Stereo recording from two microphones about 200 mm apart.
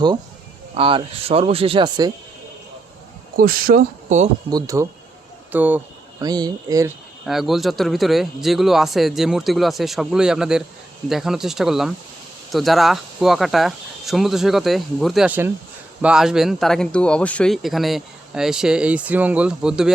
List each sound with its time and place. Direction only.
0.7 s speech: 25° right (ahead or behind)
3.3 s speech: 45° right (ahead or behind)
4.5 s speech: 15° right (ahead or behind)
7.3 s speech: centre (ahead or behind)